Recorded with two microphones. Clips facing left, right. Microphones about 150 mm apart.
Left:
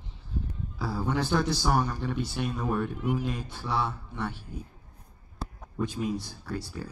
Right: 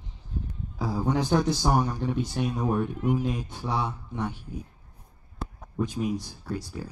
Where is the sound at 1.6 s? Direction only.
20° right (ahead or behind).